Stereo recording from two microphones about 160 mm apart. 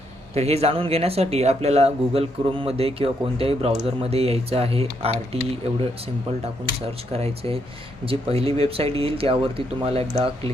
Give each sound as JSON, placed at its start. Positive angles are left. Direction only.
{"t": 0.3, "sound": "speech", "side_deg": -40}
{"t": 7.1, "sound": "speech", "side_deg": -40}